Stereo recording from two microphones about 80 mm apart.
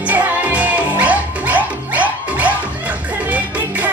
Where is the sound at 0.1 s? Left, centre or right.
Centre.